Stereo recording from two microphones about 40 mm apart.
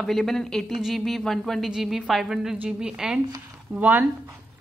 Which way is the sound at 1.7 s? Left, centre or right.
Centre.